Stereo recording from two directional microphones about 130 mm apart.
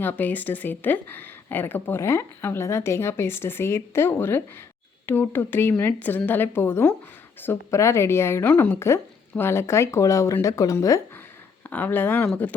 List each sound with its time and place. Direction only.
0.0 s a woman's voice: 15° left (ahead or behind)
11.7 s a woman's voice: 15° left (ahead or behind)